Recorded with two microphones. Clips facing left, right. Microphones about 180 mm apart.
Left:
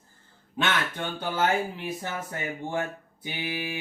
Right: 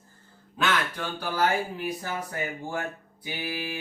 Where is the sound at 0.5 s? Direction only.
25° left (ahead or behind).